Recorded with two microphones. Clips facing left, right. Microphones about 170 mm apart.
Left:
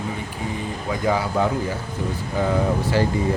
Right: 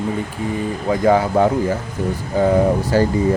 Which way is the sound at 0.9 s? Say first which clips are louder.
Right 7 dB; 50° right (ahead or behind).